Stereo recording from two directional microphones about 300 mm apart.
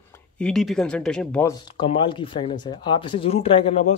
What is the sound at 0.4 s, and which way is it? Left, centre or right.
Speech, centre.